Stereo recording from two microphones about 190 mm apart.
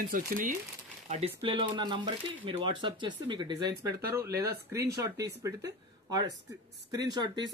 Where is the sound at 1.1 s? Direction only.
30° right (ahead or behind).